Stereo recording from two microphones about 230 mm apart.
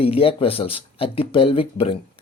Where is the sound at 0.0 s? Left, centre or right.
Left.